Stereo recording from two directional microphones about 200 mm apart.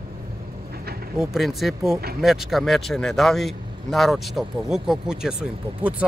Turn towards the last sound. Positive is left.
turn(degrees=-5)  # may be behind; listen again after turning